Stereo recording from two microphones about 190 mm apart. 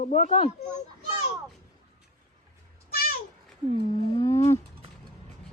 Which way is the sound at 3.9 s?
15° left (ahead or behind).